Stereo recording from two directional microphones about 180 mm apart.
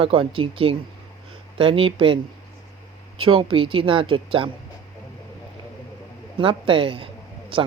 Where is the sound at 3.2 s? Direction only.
30° right (ahead or behind).